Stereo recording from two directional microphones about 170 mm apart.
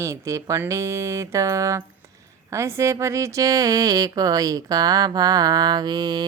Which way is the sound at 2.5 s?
15° right (ahead or behind).